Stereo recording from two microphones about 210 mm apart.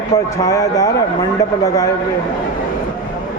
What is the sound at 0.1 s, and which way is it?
A man's voice, 15° left (ahead or behind).